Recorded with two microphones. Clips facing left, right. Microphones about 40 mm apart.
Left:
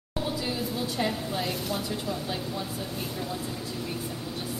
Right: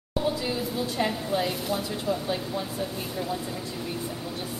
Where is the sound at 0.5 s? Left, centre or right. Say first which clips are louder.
Right 2 dB; centre.